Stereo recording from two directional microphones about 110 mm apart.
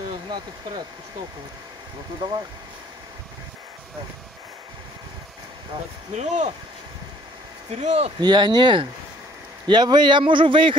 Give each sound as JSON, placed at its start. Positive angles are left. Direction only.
{"t": 0.1, "sound": "speech", "side_deg": -40}
{"t": 6.1, "sound": "speech", "side_deg": -90}
{"t": 7.7, "sound": "speech", "side_deg": -85}
{"t": 8.2, "sound": "speech", "side_deg": -40}